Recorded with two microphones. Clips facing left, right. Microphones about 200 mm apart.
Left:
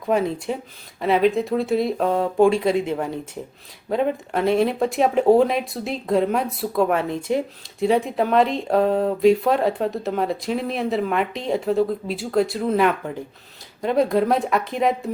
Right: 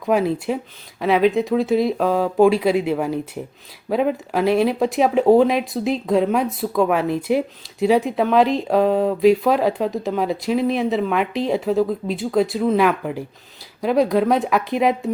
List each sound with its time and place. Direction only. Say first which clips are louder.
0.1 s speech: right 3 dB; 5° right (ahead or behind)